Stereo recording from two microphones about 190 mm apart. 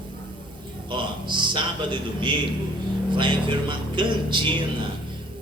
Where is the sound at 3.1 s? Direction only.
25° right (ahead or behind).